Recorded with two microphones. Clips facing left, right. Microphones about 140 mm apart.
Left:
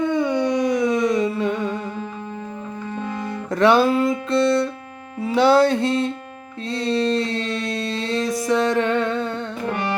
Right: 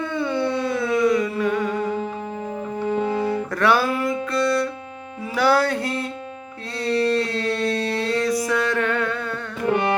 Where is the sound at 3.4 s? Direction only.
20° left (ahead or behind).